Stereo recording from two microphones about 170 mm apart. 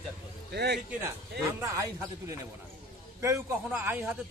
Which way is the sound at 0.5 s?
70° right (ahead or behind).